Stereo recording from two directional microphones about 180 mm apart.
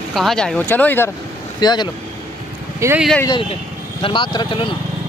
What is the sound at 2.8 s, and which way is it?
Speech, 15° right (ahead or behind).